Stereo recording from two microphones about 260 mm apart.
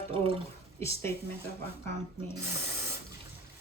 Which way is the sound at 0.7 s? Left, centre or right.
Centre.